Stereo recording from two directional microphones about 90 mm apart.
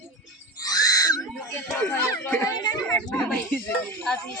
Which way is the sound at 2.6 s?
50° left (ahead or behind).